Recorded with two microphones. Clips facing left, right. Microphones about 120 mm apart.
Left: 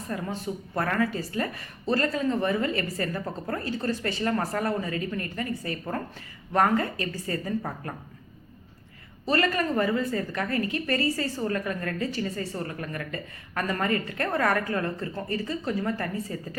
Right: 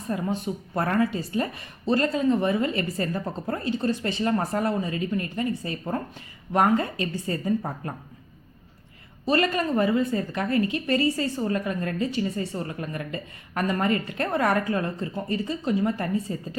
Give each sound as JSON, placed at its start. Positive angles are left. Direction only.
{"t": 0.1, "sound": "a woman's voice", "side_deg": -20}
{"t": 9.2, "sound": "a woman's voice", "side_deg": -20}